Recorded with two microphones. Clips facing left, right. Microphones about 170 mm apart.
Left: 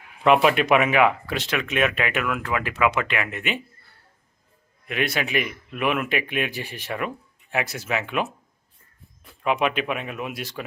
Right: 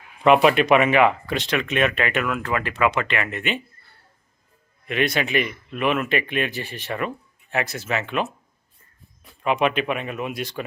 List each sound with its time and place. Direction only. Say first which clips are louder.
0.3 s speech: right 2 dB; centre (ahead or behind)
4.9 s speech: right 3 dB; 5° left (ahead or behind)
9.4 s speech: right 2 dB; 5° left (ahead or behind)